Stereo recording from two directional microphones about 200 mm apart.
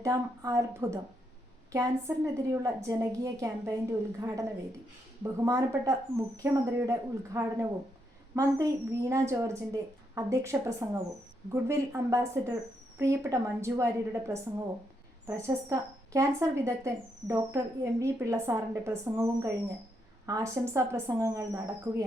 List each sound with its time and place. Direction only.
0.0 s a woman's voice: 15° right (ahead or behind)